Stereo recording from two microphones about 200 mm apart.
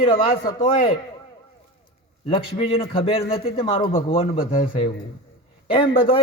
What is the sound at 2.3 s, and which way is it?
A man's voice, 30° left (ahead or behind).